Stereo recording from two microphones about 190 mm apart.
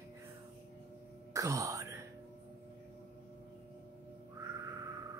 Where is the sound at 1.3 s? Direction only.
15° right (ahead or behind).